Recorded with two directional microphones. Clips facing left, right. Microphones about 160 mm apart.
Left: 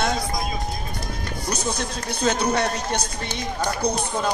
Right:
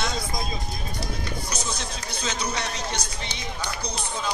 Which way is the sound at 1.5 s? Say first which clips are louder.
Left 5 dB; 60° left (ahead or behind).